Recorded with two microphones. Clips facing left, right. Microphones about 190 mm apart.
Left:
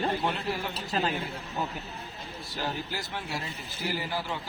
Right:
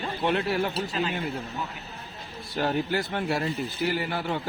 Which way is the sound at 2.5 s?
60° right (ahead or behind).